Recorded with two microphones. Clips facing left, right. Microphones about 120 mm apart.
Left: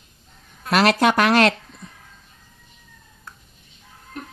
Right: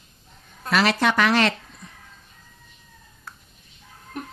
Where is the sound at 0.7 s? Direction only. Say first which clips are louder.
Left 4 dB; 55° left (ahead or behind).